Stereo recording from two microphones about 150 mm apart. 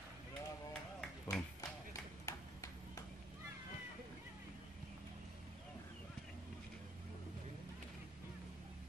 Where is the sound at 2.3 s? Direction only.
20° left (ahead or behind).